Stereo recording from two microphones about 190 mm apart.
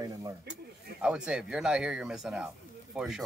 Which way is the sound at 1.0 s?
5° right (ahead or behind).